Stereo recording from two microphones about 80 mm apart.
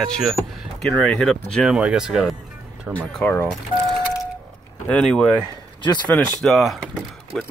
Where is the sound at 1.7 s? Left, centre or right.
Centre.